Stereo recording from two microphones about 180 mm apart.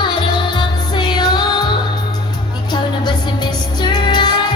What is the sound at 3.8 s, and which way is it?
Music, 25° left (ahead or behind).